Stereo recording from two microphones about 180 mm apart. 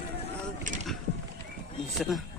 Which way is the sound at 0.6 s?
45° right (ahead or behind).